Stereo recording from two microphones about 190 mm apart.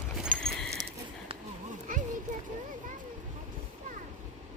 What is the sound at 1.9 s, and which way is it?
Children playing, 45° right (ahead or behind).